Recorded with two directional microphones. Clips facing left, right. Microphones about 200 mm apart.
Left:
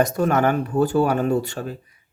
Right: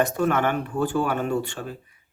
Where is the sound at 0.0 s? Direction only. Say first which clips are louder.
Left 3 dB; 40° left (ahead or behind).